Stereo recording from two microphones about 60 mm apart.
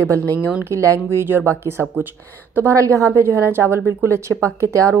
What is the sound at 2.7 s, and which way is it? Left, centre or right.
Speech, right.